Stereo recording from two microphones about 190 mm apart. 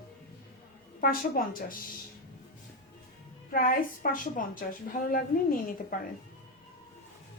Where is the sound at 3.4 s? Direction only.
50° left (ahead or behind).